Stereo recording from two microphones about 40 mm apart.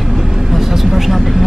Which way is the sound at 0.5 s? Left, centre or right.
Centre.